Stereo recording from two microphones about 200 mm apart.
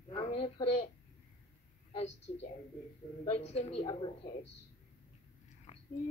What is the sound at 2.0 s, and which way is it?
Speech, 35° left (ahead or behind).